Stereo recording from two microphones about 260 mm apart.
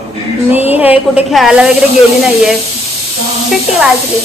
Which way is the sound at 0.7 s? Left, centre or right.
Centre.